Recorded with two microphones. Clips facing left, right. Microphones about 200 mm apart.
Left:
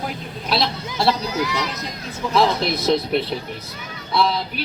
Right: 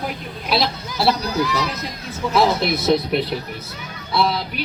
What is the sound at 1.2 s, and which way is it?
Speech, 20° left (ahead or behind).